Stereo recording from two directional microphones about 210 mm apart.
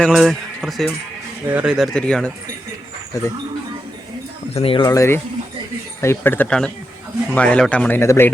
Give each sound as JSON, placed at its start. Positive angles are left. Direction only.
{"t": 0.0, "sound": "speech", "side_deg": 0}
{"t": 4.5, "sound": "a man's voice", "side_deg": 25}